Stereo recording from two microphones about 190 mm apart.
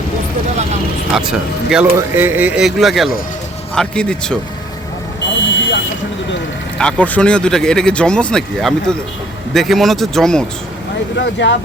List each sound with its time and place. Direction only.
1.1 s speech: 5° right (ahead or behind)
5.4 s buzzer: 75° left (ahead or behind)
6.7 s speech: 5° left (ahead or behind)
11.2 s speech: 70° left (ahead or behind)